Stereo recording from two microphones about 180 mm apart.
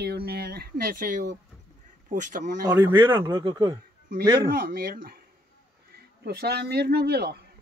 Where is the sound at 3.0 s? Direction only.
10° right (ahead or behind).